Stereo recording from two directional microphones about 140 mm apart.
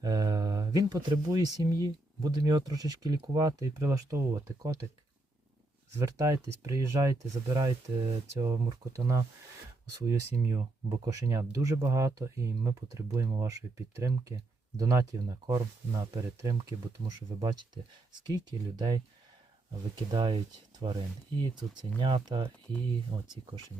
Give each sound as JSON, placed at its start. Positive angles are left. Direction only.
{"t": 0.0, "sound": "speech", "side_deg": -25}
{"t": 5.9, "sound": "speech", "side_deg": -20}
{"t": 10.3, "sound": "speech", "side_deg": -25}
{"t": 10.6, "sound": "speech", "side_deg": -35}
{"t": 11.1, "sound": "speech", "side_deg": -20}
{"t": 20.1, "sound": "speech", "side_deg": -35}